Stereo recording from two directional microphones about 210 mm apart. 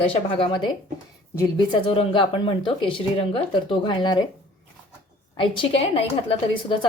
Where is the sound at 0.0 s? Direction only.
25° left (ahead or behind).